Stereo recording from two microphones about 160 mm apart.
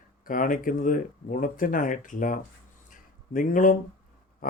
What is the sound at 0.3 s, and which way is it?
Speech, 55° left (ahead or behind).